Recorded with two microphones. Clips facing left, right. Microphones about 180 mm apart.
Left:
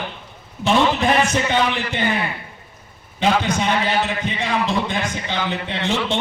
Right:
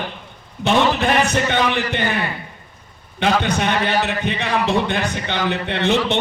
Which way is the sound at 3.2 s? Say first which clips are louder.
Even; 65° right (ahead or behind).